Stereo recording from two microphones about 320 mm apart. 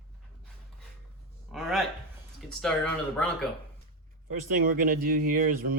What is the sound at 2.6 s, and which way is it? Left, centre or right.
Speech, centre.